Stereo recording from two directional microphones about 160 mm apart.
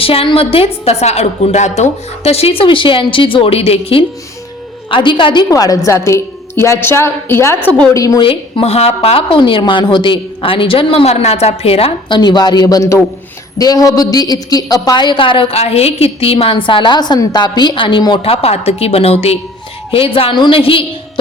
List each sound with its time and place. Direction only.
0.0 s a woman's voice: 35° left (ahead or behind)
8.2 s a woman's voice: 35° left (ahead or behind)